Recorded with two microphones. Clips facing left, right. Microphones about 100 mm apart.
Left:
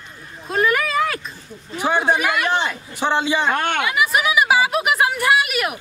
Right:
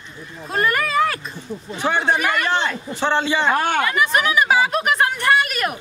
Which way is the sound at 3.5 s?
5° right (ahead or behind).